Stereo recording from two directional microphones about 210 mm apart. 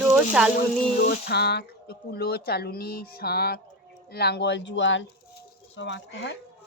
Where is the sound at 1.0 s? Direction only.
45° left (ahead or behind).